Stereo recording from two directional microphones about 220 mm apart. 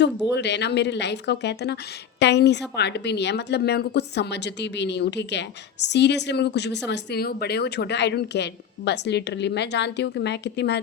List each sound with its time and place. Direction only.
0.3 s speech: 50° left (ahead or behind)